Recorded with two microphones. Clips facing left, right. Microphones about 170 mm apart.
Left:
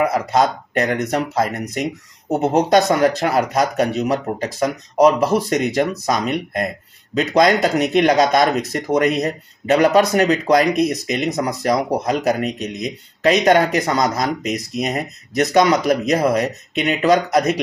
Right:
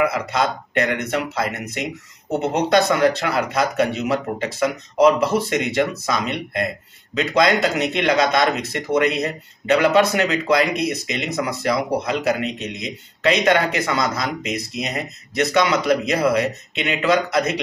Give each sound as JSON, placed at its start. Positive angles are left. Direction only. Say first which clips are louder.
{"t": 0.0, "sound": "speech", "louder": "left 3 dB", "side_deg": 45}